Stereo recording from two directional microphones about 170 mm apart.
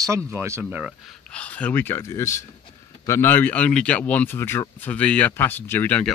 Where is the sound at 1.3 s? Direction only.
5° left (ahead or behind).